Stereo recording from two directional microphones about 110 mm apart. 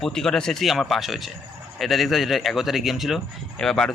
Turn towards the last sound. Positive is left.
turn(degrees=5)  # may be behind; listen again after turning